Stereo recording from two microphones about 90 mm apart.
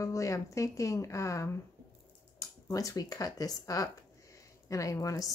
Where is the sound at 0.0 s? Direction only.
35° left (ahead or behind).